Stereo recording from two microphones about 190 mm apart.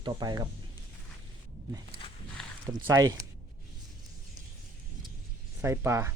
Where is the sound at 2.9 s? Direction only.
15° right (ahead or behind).